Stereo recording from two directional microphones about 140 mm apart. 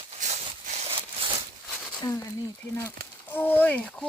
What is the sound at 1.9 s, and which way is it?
Speech, 30° left (ahead or behind).